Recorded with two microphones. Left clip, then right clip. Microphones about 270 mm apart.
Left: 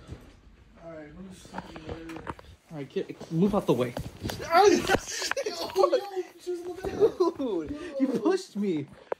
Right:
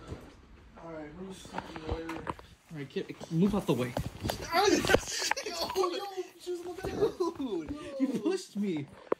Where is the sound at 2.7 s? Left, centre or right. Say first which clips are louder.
Left 4 dB; centre.